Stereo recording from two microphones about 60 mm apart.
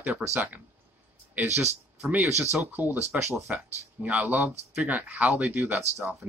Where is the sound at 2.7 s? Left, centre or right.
Right.